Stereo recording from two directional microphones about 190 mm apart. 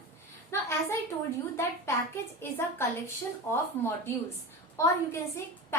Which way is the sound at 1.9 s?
15° left (ahead or behind).